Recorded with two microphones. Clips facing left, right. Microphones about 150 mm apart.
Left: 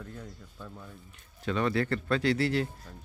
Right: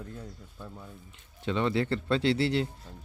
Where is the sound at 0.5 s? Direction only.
10° right (ahead or behind).